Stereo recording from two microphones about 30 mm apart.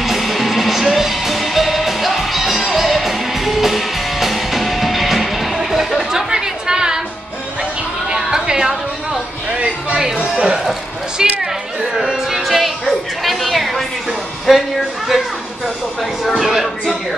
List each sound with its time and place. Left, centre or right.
0.0 s music: centre
6.1 s chatter: right
8.1 s chatter: right
11.2 s a sound: right
11.9 s music: centre
12.4 s music: centre
14.5 s speech: centre
15.0 s a sound: centre
16.3 s music: centre